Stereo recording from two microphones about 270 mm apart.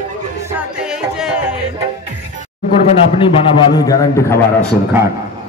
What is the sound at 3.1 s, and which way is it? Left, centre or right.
A man's voice, centre.